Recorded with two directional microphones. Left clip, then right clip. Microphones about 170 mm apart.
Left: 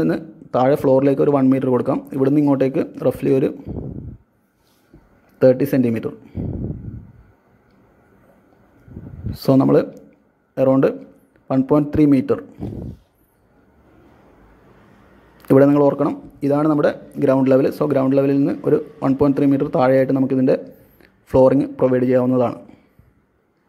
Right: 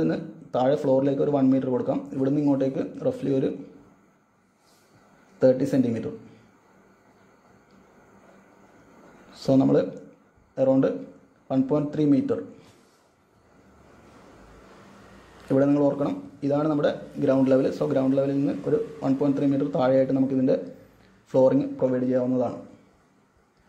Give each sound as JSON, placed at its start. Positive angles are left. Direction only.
{"t": 0.0, "sound": "a man's voice", "side_deg": 40}
{"t": 5.4, "sound": "a man's voice", "side_deg": 50}
{"t": 9.3, "sound": "a man's voice", "side_deg": 45}
{"t": 15.4, "sound": "a man's voice", "side_deg": 45}